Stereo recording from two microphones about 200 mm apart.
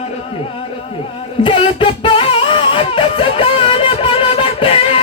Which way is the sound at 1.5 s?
25° left (ahead or behind).